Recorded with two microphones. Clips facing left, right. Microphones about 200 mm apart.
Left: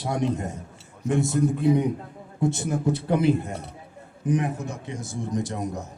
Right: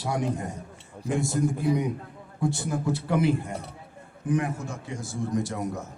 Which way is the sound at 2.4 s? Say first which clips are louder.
Left 3 dB; 20° left (ahead or behind).